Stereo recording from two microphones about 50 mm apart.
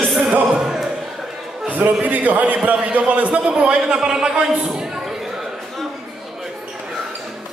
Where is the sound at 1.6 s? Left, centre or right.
Right.